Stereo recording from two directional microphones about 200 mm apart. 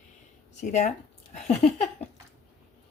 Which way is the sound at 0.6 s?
35° left (ahead or behind).